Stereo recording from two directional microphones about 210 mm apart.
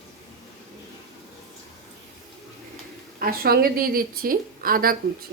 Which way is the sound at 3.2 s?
45° right (ahead or behind).